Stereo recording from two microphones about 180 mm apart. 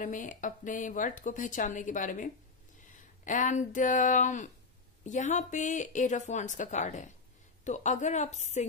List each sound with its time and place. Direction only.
0.0 s speech: 45° left (ahead or behind)